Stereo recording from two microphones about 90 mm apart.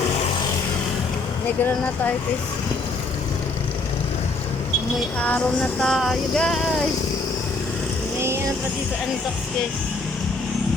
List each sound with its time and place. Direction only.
1.5 s speech: 20° left (ahead or behind)
5.8 s music: centre (ahead or behind)